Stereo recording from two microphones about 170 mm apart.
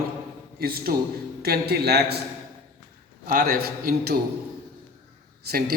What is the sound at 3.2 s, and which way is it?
Speech, 60° right (ahead or behind).